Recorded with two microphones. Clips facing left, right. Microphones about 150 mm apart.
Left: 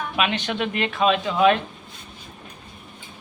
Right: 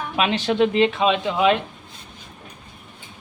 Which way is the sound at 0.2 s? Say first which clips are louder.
Right 6 dB; 30° right (ahead or behind).